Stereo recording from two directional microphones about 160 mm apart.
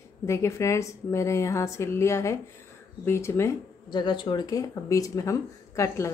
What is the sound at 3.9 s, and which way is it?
Speech, 30° left (ahead or behind).